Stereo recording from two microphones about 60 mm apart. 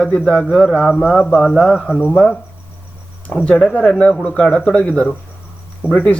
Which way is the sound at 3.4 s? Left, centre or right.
Centre.